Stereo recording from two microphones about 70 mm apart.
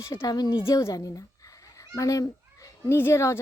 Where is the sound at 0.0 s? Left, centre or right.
Left.